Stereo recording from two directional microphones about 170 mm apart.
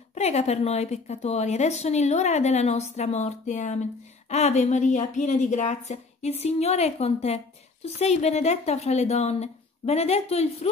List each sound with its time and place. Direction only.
0.1 s a woman's voice: 40° left (ahead or behind)